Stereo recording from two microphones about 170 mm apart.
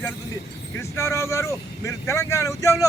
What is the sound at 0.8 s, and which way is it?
Speech, 15° left (ahead or behind).